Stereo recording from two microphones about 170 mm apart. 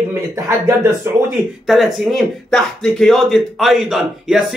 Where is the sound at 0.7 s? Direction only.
15° right (ahead or behind).